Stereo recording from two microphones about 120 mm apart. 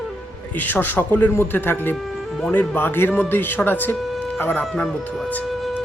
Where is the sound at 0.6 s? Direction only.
15° left (ahead or behind).